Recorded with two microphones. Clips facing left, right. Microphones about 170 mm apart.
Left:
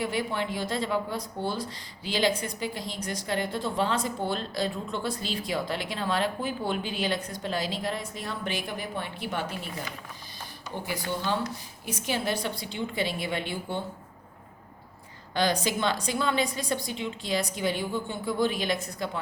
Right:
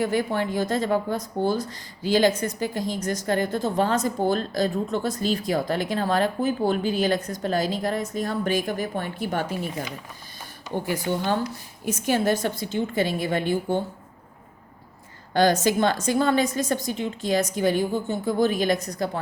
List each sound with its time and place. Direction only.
0.0 s a woman's voice: 45° right (ahead or behind)
11.9 s a woman's voice: 50° right (ahead or behind)
15.3 s a woman's voice: 45° right (ahead or behind)